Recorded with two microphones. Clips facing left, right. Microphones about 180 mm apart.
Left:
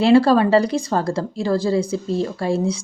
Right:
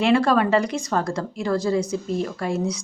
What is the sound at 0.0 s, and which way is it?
A woman's voice, 30° left (ahead or behind).